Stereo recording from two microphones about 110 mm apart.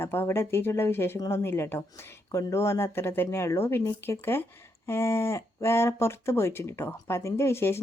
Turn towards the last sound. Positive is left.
turn(degrees=20)  # may be behind; listen again after turning